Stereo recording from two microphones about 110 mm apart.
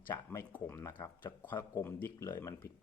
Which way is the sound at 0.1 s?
25° left (ahead or behind).